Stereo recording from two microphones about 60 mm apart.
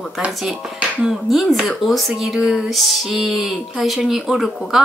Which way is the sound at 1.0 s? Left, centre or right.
Centre.